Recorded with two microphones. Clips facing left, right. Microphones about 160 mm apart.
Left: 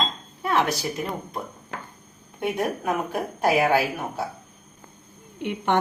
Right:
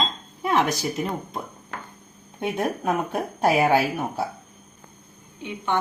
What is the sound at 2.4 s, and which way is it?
A woman's voice, 25° right (ahead or behind).